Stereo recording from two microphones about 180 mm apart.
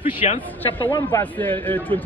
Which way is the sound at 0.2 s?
40° left (ahead or behind).